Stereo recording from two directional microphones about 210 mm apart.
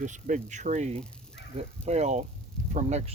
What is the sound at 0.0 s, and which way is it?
Speech, 35° right (ahead or behind).